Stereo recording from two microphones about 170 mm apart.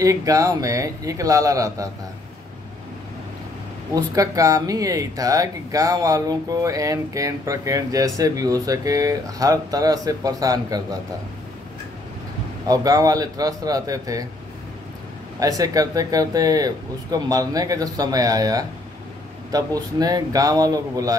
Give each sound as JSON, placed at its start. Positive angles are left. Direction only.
{"t": 0.0, "sound": "speech", "side_deg": -20}
{"t": 3.9, "sound": "speech", "side_deg": -20}
{"t": 12.6, "sound": "speech", "side_deg": -20}
{"t": 15.3, "sound": "speech", "side_deg": -20}